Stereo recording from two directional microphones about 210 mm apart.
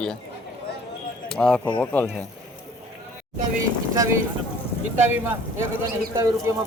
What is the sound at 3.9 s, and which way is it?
Speech, 15° right (ahead or behind).